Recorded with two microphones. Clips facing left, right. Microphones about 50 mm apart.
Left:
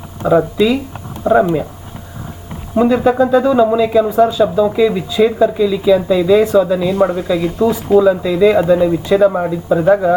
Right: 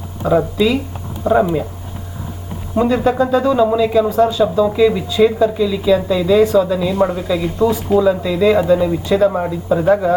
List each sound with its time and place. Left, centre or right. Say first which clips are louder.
0.2 s speech: left 2 dB; centre
2.7 s speech: left 3 dB; centre